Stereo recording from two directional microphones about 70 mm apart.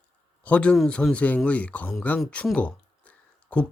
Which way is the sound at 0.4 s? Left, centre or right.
Centre.